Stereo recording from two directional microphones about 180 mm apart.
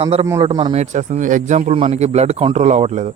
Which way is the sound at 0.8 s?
40° right (ahead or behind).